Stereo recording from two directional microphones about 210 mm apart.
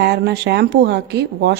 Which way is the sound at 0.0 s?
50° right (ahead or behind).